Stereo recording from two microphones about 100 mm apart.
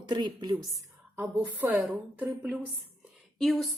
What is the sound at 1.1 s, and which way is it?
Speech, 25° right (ahead or behind).